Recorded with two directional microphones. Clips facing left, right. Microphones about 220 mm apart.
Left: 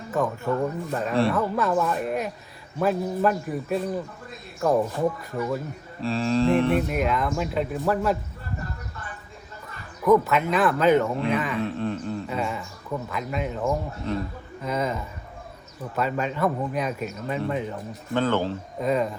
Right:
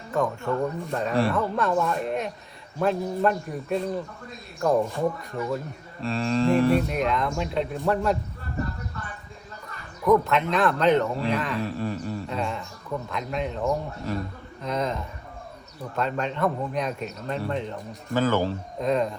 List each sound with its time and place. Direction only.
0.1 s speech: 5° left (ahead or behind)
10.0 s speech: 5° left (ahead or behind)
18.1 s speech: 5° right (ahead or behind)
18.8 s speech: 5° left (ahead or behind)